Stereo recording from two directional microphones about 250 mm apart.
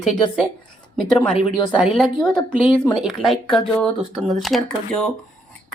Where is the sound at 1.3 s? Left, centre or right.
Left.